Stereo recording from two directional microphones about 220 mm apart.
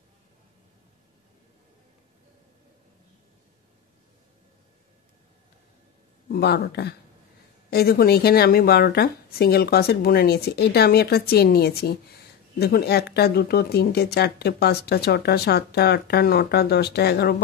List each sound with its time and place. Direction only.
6.2 s speech: 45° left (ahead or behind)